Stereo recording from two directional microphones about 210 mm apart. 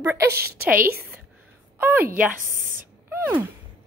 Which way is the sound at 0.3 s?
50° right (ahead or behind).